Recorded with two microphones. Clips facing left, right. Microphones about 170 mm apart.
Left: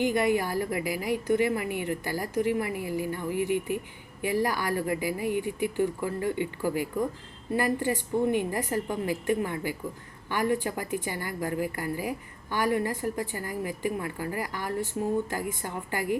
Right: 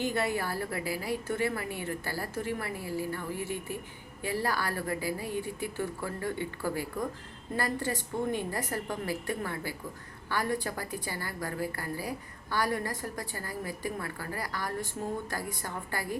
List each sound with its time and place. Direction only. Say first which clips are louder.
0.0 s a woman's voice: left 6 dB; 15° left (ahead or behind)